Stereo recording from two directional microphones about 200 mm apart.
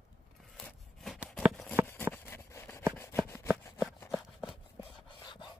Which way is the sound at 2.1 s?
10° left (ahead or behind).